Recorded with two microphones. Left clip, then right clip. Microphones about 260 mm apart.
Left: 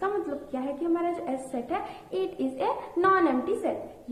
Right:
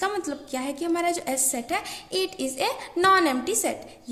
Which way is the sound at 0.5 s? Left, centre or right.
Right.